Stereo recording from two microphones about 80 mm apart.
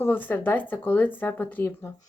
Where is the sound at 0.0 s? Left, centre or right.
Left.